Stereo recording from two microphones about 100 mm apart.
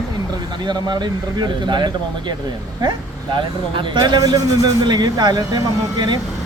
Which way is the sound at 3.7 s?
50° right (ahead or behind).